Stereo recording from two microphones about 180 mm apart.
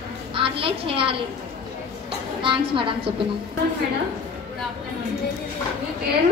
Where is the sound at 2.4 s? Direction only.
30° right (ahead or behind).